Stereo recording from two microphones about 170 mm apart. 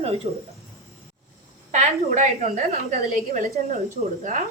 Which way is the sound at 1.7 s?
45° right (ahead or behind).